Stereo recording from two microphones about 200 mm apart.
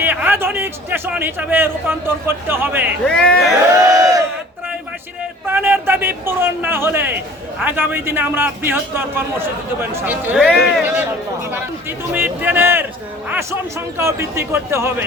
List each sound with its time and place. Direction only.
0.0 s a man's voice: 10° right (ahead or behind)
3.1 s speech: 5° left (ahead or behind)
3.9 s battle cry: 15° right (ahead or behind)
5.5 s a man's voice: 10° right (ahead or behind)